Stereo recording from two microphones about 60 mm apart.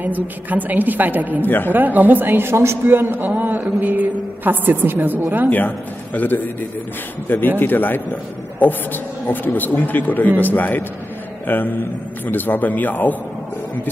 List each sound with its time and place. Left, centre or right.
0.0 s a woman's voice: right
1.4 s a man's voice: left
1.7 s a woman's voice: right
2.8 s a woman's voice: right
5.5 s a man's voice: left